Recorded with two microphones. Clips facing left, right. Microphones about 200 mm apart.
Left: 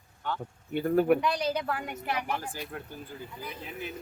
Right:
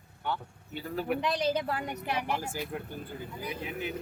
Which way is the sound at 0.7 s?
55° left (ahead or behind).